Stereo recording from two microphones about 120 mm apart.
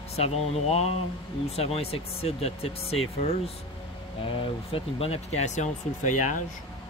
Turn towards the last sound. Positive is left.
turn(degrees=90)